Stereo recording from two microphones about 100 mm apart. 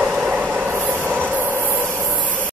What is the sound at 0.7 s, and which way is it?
Train, 20° right (ahead or behind).